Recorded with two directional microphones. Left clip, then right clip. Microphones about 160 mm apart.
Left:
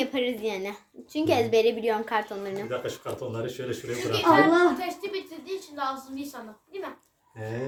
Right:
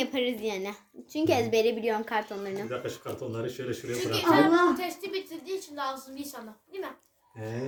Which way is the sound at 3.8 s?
10° right (ahead or behind).